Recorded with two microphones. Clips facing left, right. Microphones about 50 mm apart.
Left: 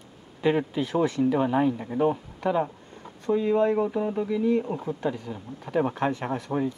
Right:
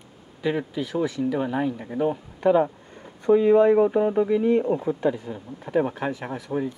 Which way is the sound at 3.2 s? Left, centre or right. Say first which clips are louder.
Right 6 dB; right.